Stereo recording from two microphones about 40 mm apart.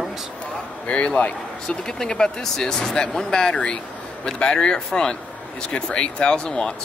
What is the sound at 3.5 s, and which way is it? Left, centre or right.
Speech, left.